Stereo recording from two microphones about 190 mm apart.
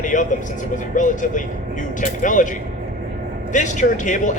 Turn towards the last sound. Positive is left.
turn(degrees=40)  # may be behind; listen again after turning